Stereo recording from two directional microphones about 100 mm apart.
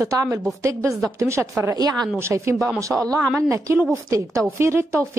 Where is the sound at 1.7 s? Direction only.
40° right (ahead or behind).